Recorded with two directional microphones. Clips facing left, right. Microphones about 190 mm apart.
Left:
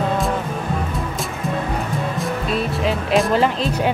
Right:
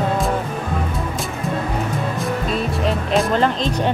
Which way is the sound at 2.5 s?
Centre (ahead or behind).